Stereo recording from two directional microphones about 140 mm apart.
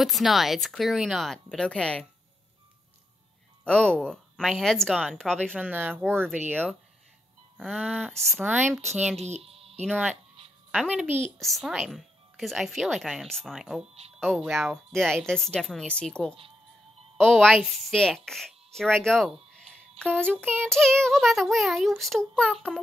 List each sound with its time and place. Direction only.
0.0 s speech: centre (ahead or behind)
3.6 s speech: 5° left (ahead or behind)
5.6 s speech: 15° right (ahead or behind)
7.5 s speech: 5° right (ahead or behind)
8.4 s speech: 10° right (ahead or behind)
9.2 s music: 50° right (ahead or behind)
10.7 s speech: 5° right (ahead or behind)
11.3 s speech: centre (ahead or behind)
20.0 s child singing: 5° left (ahead or behind)
20.3 s speech: 5° left (ahead or behind)